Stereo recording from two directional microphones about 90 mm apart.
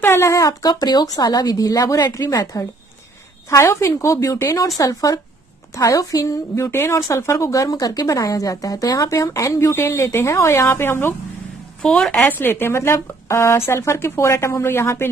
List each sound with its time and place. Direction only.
0.0 s speech: 25° left (ahead or behind)
6.5 s speech: 30° left (ahead or behind)
11.8 s a woman's voice: 10° left (ahead or behind)
12.3 s speech: 25° left (ahead or behind)